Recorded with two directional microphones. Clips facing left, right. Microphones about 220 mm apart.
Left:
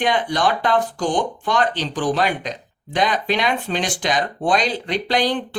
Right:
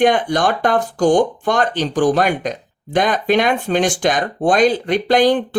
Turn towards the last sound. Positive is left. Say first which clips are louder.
# right 7 dB
turn(degrees=-50)  # may be behind; listen again after turning